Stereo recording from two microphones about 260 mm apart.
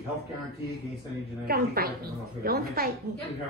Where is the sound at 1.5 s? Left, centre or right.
Right.